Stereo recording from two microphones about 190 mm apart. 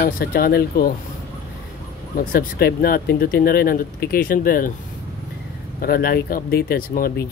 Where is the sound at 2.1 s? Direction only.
50° left (ahead or behind).